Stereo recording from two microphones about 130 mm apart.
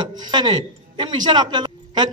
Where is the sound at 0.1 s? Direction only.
35° right (ahead or behind).